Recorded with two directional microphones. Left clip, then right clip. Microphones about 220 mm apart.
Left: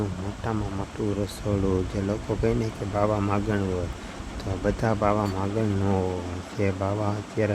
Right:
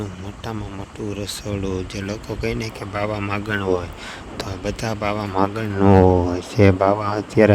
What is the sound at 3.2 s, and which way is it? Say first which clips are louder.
Speech: right 3 dB; 35° right (ahead or behind).